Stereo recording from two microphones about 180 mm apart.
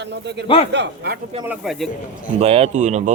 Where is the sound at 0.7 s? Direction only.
70° right (ahead or behind).